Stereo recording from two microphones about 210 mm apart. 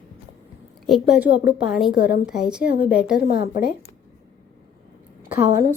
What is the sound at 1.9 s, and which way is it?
Speech, 50° left (ahead or behind).